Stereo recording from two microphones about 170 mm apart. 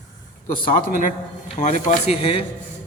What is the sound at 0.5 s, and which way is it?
A man's voice, 55° left (ahead or behind).